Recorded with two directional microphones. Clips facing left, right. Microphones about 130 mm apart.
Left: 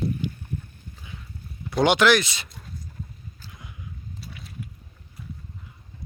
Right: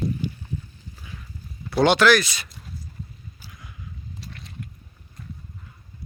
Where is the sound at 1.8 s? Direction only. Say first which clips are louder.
Right 1 dB; 15° left (ahead or behind).